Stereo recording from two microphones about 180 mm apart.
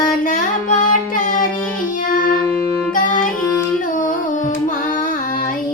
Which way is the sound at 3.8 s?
45° left (ahead or behind).